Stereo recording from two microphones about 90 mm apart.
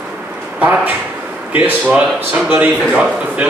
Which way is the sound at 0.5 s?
15° right (ahead or behind).